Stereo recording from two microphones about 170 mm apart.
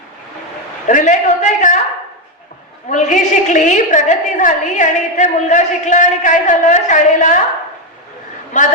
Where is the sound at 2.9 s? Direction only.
45° left (ahead or behind).